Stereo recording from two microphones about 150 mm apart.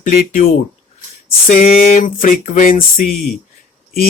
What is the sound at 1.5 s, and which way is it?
Speech, 65° left (ahead or behind).